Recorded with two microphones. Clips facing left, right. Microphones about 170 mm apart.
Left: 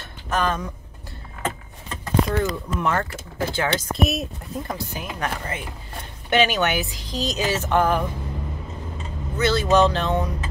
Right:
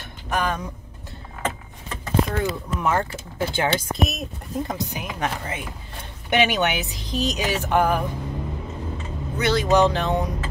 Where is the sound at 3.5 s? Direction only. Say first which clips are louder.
Right 1 dB; 20° right (ahead or behind).